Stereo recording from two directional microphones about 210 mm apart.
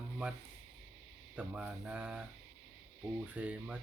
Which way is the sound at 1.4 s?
5° right (ahead or behind).